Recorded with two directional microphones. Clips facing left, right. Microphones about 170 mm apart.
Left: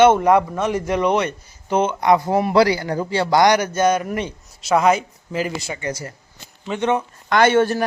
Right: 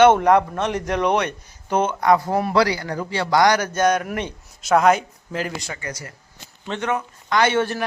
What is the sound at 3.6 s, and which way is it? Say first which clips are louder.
A man's voice: left 1 dB; 10° left (ahead or behind).